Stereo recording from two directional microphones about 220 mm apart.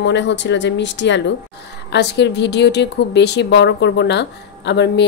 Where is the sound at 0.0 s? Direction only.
55° left (ahead or behind).